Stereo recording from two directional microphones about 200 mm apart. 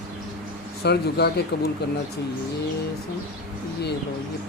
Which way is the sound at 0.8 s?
55° left (ahead or behind).